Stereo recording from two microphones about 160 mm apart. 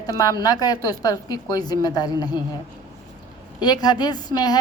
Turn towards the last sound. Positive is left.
turn(degrees=25)  # may be behind; listen again after turning